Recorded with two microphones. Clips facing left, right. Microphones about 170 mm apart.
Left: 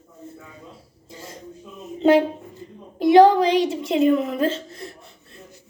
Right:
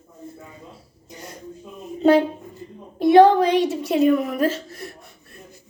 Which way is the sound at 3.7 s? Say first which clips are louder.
Right 1 dB; 20° left (ahead or behind).